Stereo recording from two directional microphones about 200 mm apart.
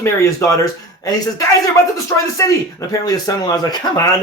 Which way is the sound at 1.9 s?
15° left (ahead or behind).